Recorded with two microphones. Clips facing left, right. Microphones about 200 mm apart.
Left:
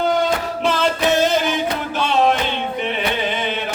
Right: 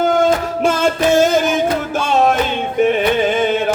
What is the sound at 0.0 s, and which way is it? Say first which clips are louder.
Music: right 4 dB; 45° right (ahead or behind).